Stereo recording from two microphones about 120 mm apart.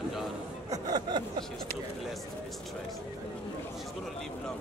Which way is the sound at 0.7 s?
35° right (ahead or behind).